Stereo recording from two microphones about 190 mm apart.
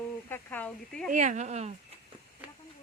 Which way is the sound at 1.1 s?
40° right (ahead or behind).